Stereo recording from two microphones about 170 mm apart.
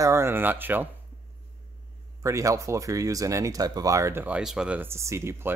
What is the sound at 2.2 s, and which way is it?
Speech, 20° right (ahead or behind).